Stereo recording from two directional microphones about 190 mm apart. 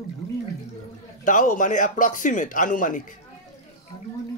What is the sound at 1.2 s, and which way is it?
Speech, 45° left (ahead or behind).